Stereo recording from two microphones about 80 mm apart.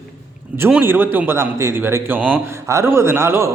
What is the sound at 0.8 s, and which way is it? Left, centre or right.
A man's voice, right.